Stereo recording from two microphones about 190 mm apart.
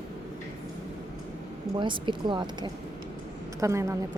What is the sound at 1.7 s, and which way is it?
A woman's voice, 25° right (ahead or behind).